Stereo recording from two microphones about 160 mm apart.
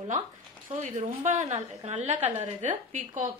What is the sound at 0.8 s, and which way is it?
A woman's voice, 45° right (ahead or behind).